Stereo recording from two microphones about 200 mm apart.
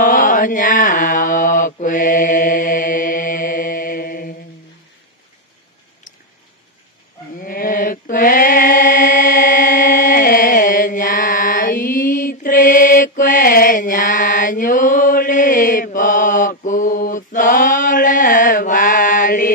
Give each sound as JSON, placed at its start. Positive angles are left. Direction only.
{"t": 0.0, "sound": "mantra", "side_deg": 45}
{"t": 7.3, "sound": "mantra", "side_deg": 45}